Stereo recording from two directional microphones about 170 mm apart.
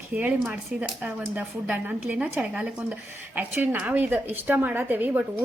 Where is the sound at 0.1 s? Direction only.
10° right (ahead or behind).